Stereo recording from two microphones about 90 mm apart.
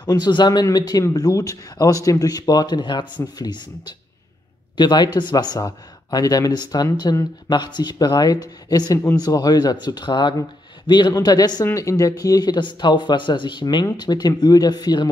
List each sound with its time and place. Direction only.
0.0 s speech: 50° left (ahead or behind)
11.6 s speech: 35° left (ahead or behind)